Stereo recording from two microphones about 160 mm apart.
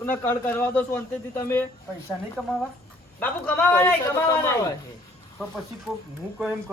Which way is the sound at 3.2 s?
10° left (ahead or behind).